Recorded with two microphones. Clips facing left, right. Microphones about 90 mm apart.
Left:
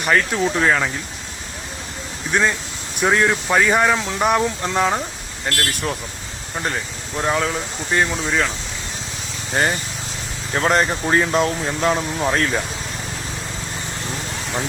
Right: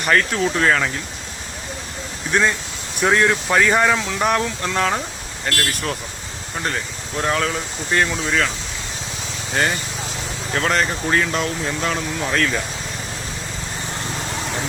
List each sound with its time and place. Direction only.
0.0 s speech: 10° left (ahead or behind)
2.3 s speech: 5° left (ahead or behind)
7.2 s speech: 5° left (ahead or behind)
10.5 s speech: 20° left (ahead or behind)